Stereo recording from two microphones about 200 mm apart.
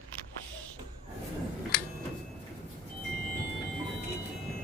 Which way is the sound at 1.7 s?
50° left (ahead or behind).